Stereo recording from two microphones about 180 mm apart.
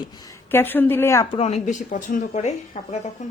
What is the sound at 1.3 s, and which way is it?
A woman's voice, 35° left (ahead or behind).